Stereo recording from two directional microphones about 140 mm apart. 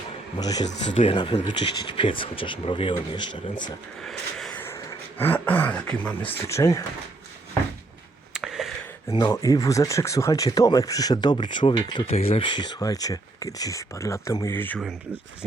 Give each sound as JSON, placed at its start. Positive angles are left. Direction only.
{"t": 0.3, "sound": "speech", "side_deg": 25}
{"t": 4.0, "sound": "a sound", "side_deg": 5}
{"t": 4.6, "sound": "speech", "side_deg": 15}
{"t": 6.5, "sound": "speech", "side_deg": 25}
{"t": 8.3, "sound": "a sound", "side_deg": -5}
{"t": 9.1, "sound": "speech", "side_deg": 25}